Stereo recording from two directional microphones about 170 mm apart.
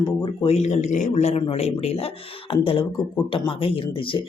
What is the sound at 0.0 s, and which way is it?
Speech, 30° left (ahead or behind).